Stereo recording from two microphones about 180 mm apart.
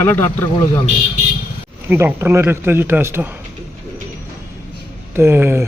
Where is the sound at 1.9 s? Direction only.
15° right (ahead or behind).